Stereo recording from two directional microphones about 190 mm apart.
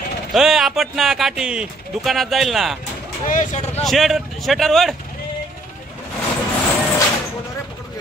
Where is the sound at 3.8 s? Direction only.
Centre (ahead or behind).